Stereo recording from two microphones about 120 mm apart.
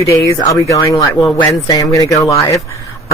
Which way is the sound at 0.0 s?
25° left (ahead or behind).